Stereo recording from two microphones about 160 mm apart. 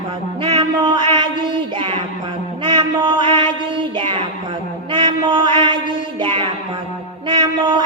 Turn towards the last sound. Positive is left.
turn(degrees=-30)  # may be behind; listen again after turning